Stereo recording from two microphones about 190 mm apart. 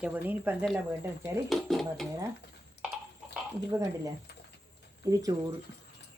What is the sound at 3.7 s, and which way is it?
Speech, 15° right (ahead or behind).